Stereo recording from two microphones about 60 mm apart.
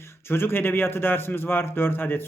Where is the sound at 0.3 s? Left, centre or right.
Left.